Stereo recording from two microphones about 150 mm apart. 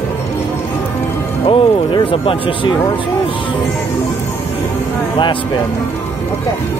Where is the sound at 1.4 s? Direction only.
35° left (ahead or behind).